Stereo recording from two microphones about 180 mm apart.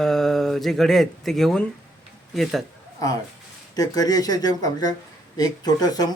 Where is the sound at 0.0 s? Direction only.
Centre (ahead or behind).